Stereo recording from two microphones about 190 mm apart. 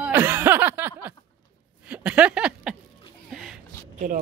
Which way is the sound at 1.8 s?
5° right (ahead or behind).